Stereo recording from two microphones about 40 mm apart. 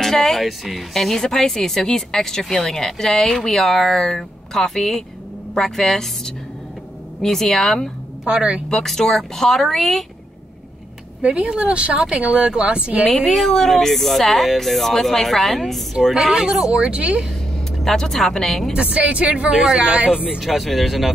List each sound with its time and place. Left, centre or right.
0.0 s a woman's voice: centre
8.3 s speech: right
9.0 s a woman's voice: centre
11.2 s speech: right
12.2 s speech: right
12.4 s speech: right
13.1 s speech: centre
16.7 s speech: right
17.8 s a woman's voice: centre
18.7 s speech: right
19.5 s speech: centre
19.9 s speech: right
20.3 s speech: centre